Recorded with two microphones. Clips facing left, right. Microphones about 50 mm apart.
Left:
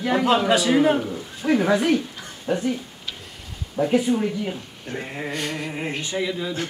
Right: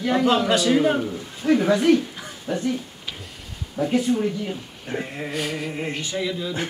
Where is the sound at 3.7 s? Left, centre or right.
Centre.